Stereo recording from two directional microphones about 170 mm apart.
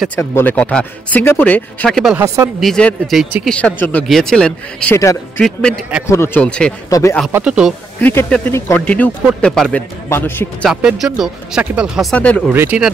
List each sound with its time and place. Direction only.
0.1 s speech: 15° left (ahead or behind)
2.0 s speech: 5° right (ahead or behind)
2.2 s speech: 15° right (ahead or behind)
2.6 s speech: 5° left (ahead or behind)
6.9 s speech: 15° left (ahead or behind)
7.3 s speech: 5° right (ahead or behind)
8.0 s speech: 10° left (ahead or behind)
10.7 s speech: 5° right (ahead or behind)
12.4 s speech: 10° right (ahead or behind)